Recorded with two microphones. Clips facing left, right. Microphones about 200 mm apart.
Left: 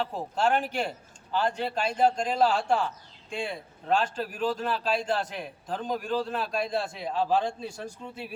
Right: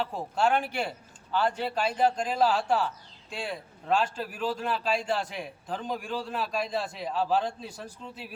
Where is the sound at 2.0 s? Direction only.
5° right (ahead or behind).